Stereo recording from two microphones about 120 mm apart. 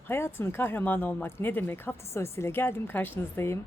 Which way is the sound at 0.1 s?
20° left (ahead or behind).